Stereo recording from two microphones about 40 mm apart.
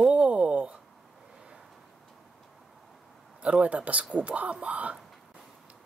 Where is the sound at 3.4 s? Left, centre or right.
Right.